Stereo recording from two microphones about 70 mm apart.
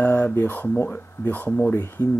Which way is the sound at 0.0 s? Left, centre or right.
Left.